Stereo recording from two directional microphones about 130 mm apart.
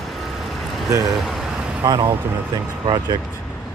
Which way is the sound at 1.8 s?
30° right (ahead or behind).